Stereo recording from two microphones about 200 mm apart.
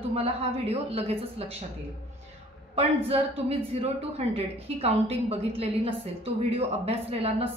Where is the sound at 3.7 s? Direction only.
30° right (ahead or behind).